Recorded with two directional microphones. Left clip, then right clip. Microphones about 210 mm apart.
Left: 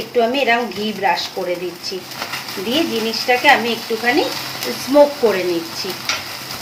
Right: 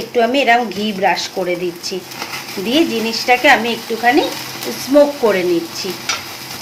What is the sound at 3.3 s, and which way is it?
Speech, 30° right (ahead or behind).